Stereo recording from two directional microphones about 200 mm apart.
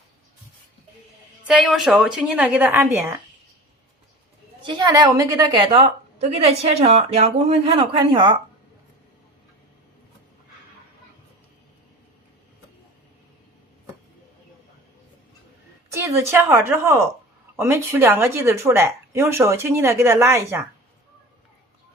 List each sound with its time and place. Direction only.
1.5 s a woman's voice: 5° right (ahead or behind)
4.6 s a woman's voice: 20° right (ahead or behind)
15.9 s a sound: 15° right (ahead or behind)
16.3 s speech: 10° right (ahead or behind)